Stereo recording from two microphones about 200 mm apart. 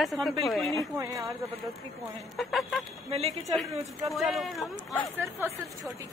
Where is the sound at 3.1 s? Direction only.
30° right (ahead or behind).